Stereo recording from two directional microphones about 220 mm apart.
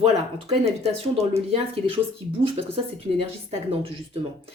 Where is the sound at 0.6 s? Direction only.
30° right (ahead or behind).